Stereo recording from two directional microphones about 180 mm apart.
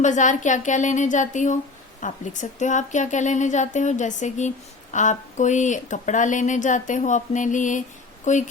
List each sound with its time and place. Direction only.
0.0 s a woman's voice: 45° left (ahead or behind)